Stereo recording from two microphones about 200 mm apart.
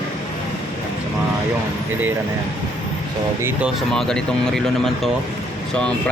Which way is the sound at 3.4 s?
10° right (ahead or behind).